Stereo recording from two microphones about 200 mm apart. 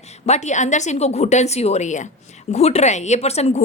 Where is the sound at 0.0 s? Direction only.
35° left (ahead or behind).